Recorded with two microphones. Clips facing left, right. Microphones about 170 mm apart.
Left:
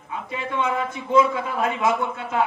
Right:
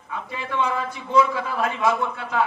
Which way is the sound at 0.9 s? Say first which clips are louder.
Left 2 dB; 20° left (ahead or behind).